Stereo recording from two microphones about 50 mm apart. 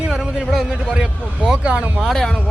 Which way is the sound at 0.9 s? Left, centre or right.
Centre.